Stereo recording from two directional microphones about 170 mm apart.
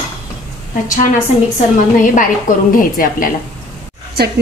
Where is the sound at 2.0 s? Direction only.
50° left (ahead or behind).